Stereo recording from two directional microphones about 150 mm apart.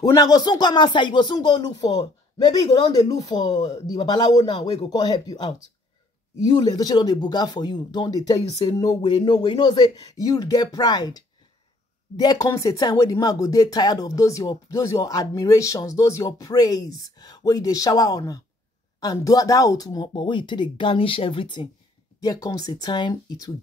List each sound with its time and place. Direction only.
0.0 s speech: 25° left (ahead or behind)
6.6 s speech: 25° left (ahead or behind)